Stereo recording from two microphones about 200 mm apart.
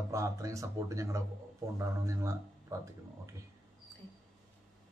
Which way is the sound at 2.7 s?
15° right (ahead or behind).